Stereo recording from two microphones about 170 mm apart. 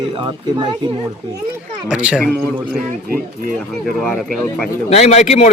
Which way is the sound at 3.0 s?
55° right (ahead or behind).